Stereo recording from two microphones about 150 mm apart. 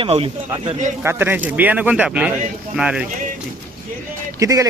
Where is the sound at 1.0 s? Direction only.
15° right (ahead or behind).